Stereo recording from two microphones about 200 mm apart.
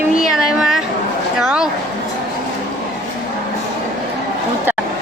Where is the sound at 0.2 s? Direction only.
Centre (ahead or behind).